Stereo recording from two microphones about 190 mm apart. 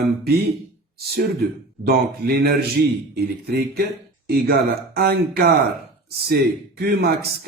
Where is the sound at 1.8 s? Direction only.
55° right (ahead or behind).